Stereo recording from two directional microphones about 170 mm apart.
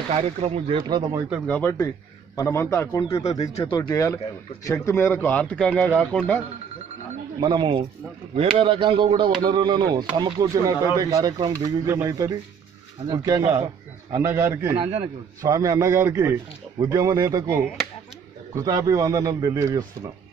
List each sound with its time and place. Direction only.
0.1 s speech: 40° right (ahead or behind)
1.5 s speech: 10° left (ahead or behind)
7.3 s speech: 25° right (ahead or behind)
14.1 s a man's voice: 15° right (ahead or behind)